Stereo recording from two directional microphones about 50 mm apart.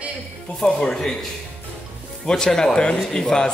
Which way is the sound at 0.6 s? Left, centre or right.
Centre.